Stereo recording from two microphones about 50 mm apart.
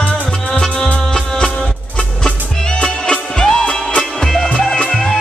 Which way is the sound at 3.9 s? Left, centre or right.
Centre.